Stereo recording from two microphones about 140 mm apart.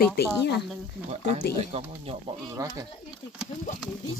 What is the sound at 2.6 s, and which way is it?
Speech, 25° right (ahead or behind).